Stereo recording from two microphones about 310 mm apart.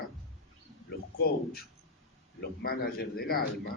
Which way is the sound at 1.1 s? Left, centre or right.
Left.